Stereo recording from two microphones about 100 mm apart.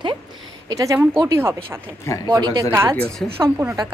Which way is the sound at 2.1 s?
30° left (ahead or behind).